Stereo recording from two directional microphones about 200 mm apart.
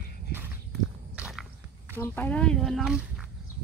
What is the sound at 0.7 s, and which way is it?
Walk, centre (ahead or behind).